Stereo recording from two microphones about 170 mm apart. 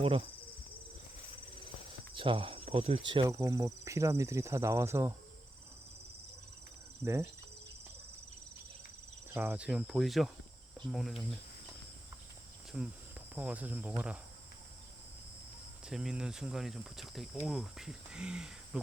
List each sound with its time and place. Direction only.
0.0 s speech: 35° right (ahead or behind)
2.1 s speech: 30° right (ahead or behind)
3.1 s speech: 25° right (ahead or behind)
7.0 s speech: 15° right (ahead or behind)
9.3 s speech: 10° right (ahead or behind)
12.7 s speech: 5° right (ahead or behind)
15.8 s speech: 5° right (ahead or behind)